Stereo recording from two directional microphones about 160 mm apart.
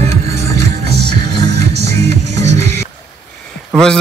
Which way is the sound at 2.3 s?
45° right (ahead or behind).